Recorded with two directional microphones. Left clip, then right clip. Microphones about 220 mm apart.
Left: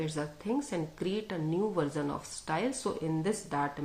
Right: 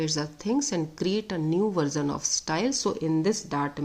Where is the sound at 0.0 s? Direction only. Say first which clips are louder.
Right 6 dB; 45° right (ahead or behind).